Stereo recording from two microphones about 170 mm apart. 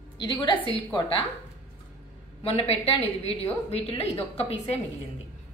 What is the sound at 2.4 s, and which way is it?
A woman's voice, 35° left (ahead or behind).